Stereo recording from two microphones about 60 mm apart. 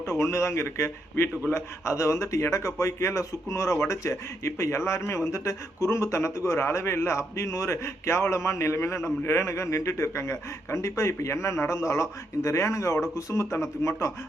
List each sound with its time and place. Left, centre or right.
0.0 s speech: left